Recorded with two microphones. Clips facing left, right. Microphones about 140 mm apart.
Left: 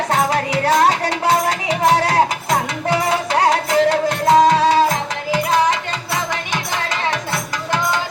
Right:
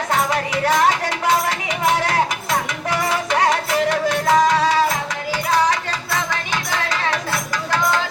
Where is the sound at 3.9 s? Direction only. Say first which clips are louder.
Left 3 dB; 30° left (ahead or behind).